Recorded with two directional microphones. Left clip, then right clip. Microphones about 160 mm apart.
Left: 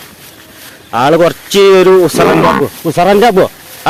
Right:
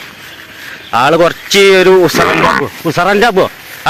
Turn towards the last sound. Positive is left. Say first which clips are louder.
# left 1 dB
turn(degrees=10)  # may be behind; listen again after turning